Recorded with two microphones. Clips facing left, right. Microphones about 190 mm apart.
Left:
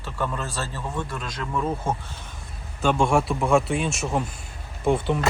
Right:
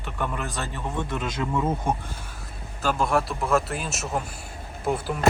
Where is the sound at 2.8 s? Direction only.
5° right (ahead or behind).